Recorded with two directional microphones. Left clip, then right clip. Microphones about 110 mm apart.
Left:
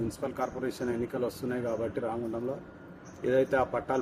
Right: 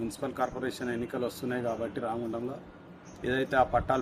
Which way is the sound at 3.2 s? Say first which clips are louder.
Left 1 dB; 20° right (ahead or behind).